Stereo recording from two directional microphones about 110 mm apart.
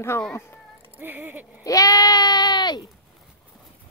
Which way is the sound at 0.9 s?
20° right (ahead or behind).